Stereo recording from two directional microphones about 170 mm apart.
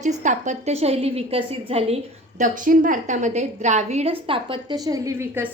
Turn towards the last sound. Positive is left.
turn(degrees=-15)  # may be behind; listen again after turning